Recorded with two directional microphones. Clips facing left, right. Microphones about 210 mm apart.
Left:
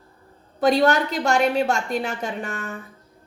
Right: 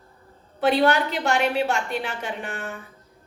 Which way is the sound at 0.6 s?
40° left (ahead or behind).